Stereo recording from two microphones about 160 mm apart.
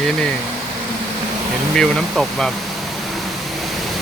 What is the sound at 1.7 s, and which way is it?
Speech, 5° left (ahead or behind).